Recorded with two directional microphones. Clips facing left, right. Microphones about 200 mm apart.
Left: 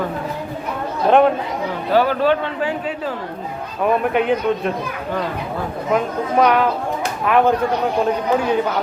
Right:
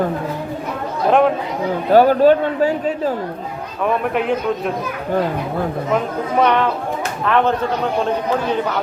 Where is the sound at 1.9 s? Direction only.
45° right (ahead or behind).